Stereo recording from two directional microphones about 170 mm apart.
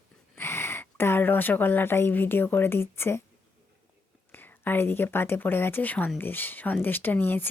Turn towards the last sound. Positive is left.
turn(degrees=10)  # may be behind; listen again after turning